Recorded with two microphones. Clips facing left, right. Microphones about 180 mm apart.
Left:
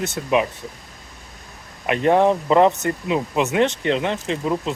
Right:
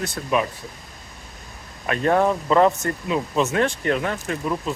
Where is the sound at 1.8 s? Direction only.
20° left (ahead or behind).